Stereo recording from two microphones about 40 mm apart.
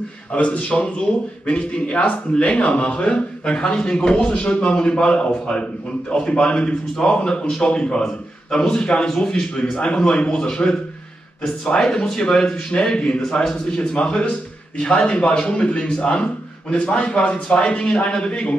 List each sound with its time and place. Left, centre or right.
0.3 s a man's voice: left
13.2 s a man's voice: centre
13.9 s a man's voice: left